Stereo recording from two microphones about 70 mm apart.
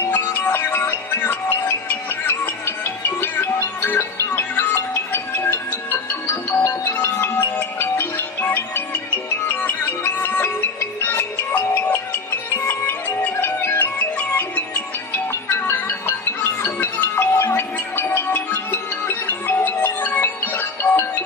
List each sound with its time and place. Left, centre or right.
0.1 s music: left
3.8 s music: left